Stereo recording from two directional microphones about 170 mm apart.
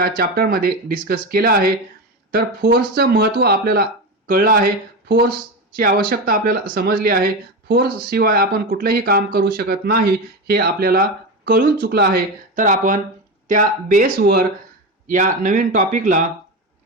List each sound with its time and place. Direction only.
0.0 s speech: 65° right (ahead or behind)
5.0 s speech: 70° right (ahead or behind)
5.7 s a man's voice: 55° right (ahead or behind)
14.2 s speech: 75° right (ahead or behind)
15.0 s a man's voice: 50° right (ahead or behind)